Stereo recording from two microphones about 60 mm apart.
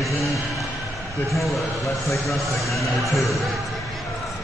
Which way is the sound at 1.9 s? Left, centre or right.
Left.